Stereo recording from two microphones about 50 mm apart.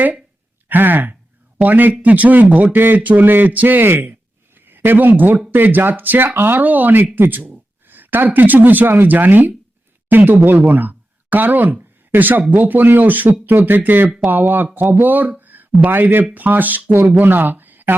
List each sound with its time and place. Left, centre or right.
0.7 s speech: right
15.4 s a sound: right
16.3 s a man's voice: right